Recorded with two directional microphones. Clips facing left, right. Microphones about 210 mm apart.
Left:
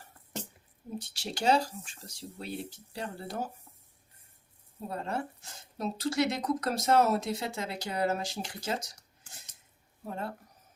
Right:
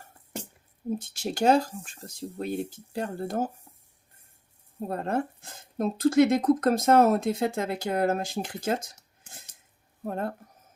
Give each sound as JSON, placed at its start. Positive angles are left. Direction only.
{"t": 0.9, "sound": "speech", "side_deg": -50}
{"t": 4.9, "sound": "speech", "side_deg": -50}
{"t": 10.0, "sound": "speech", "side_deg": -50}